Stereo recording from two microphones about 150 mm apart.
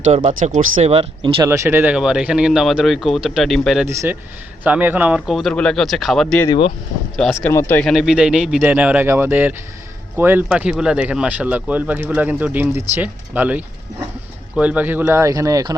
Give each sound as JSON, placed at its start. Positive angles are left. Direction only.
{"t": 0.3, "sound": "speech", "side_deg": -50}
{"t": 0.9, "sound": "speech", "side_deg": -40}
{"t": 1.4, "sound": "speech", "side_deg": -20}
{"t": 3.8, "sound": "speech", "side_deg": -20}
{"t": 7.4, "sound": "speech", "side_deg": 15}
{"t": 7.9, "sound": "speech", "side_deg": 0}